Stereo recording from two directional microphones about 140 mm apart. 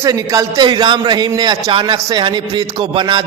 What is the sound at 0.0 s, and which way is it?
A man's voice, 25° right (ahead or behind).